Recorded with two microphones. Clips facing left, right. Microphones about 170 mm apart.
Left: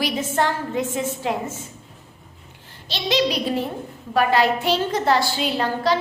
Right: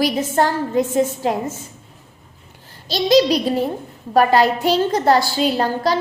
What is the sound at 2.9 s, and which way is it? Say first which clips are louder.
A woman's voice: right 7 dB; 40° right (ahead or behind).